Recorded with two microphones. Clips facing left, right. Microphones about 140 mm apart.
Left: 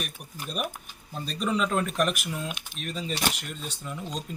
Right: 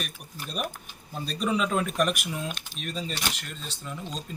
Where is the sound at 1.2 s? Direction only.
Centre (ahead or behind).